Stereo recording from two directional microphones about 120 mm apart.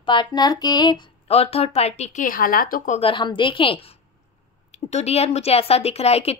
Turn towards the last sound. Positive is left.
turn(degrees=60)  # may be behind; listen again after turning